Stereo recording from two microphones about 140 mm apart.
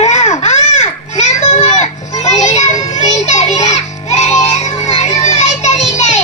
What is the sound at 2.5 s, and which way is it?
Music, 55° left (ahead or behind).